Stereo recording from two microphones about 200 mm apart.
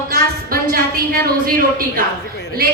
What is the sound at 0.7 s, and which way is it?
Speech, 45° right (ahead or behind).